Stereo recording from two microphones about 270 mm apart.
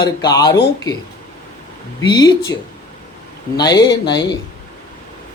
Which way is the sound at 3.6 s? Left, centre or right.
Centre.